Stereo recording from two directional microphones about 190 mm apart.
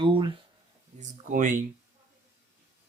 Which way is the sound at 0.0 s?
25° right (ahead or behind).